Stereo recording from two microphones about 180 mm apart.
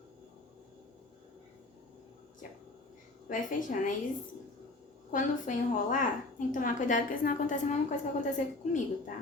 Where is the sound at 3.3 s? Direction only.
45° left (ahead or behind).